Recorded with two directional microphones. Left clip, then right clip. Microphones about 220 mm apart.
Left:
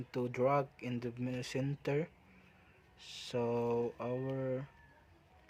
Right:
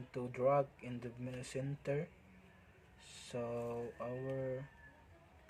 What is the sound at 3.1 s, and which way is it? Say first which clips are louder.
Speech: left 7 dB; 45° left (ahead or behind).